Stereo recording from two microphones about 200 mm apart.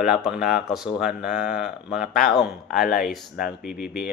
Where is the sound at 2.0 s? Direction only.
45° left (ahead or behind).